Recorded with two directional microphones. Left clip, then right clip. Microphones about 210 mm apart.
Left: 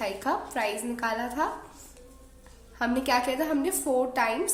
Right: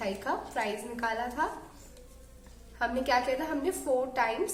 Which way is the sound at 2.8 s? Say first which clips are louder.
Left 2 dB; 45° left (ahead or behind).